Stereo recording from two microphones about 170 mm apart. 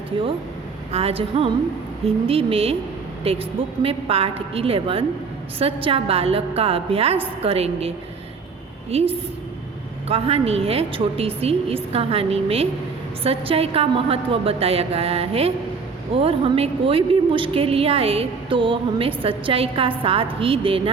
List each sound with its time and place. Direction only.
0.1 s a woman's voice: 30° right (ahead or behind)